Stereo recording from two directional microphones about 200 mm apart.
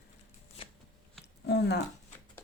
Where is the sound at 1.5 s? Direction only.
55° left (ahead or behind).